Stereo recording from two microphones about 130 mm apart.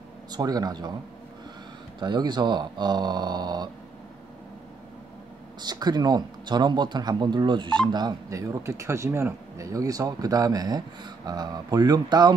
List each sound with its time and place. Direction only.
0.3 s a man's voice: 30° right (ahead or behind)
2.0 s a man's voice: 35° right (ahead or behind)
5.6 s a man's voice: 30° right (ahead or behind)